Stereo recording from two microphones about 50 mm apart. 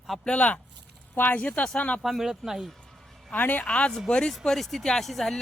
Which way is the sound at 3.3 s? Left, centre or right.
Left.